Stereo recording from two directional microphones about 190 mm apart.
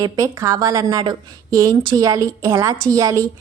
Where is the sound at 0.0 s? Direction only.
15° right (ahead or behind).